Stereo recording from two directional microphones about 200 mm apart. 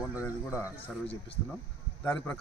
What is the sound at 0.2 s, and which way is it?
Speech, 15° left (ahead or behind).